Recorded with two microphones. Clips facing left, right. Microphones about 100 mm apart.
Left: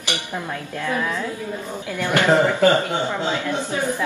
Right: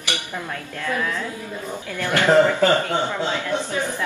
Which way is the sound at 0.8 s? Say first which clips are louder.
Left 1 dB; 20° left (ahead or behind).